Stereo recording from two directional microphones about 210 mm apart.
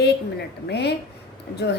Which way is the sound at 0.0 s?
50° left (ahead or behind).